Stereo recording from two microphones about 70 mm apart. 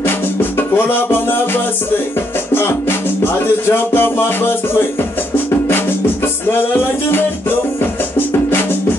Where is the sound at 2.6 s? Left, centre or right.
Left.